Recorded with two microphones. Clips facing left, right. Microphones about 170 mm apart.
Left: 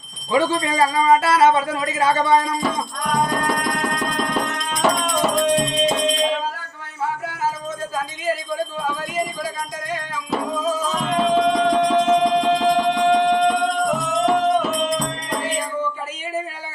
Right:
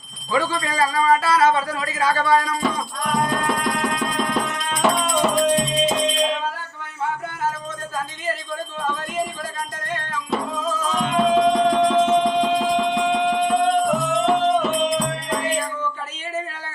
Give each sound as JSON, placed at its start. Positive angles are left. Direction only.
{"t": 0.3, "sound": "speech", "side_deg": 25}
{"t": 2.6, "sound": "music", "side_deg": 0}
{"t": 8.5, "sound": "music", "side_deg": 10}